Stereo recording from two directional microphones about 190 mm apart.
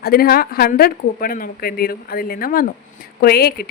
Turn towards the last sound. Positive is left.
turn(degrees=55)  # may be behind; listen again after turning